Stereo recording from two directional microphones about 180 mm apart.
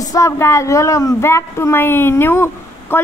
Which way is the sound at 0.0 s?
20° left (ahead or behind).